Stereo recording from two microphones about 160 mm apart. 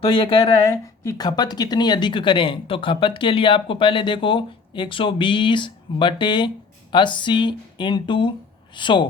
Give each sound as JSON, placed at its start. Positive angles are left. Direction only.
{"t": 0.0, "sound": "speech", "side_deg": 30}
{"t": 0.6, "sound": "speech", "side_deg": 20}